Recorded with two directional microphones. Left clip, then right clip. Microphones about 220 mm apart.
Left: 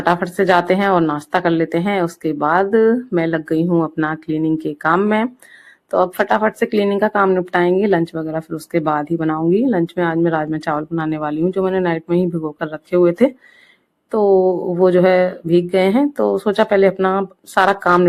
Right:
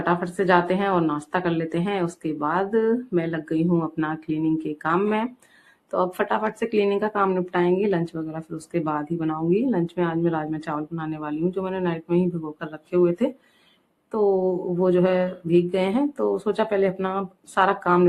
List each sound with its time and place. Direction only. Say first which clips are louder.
0.0 s speech: left 7 dB; 35° left (ahead or behind)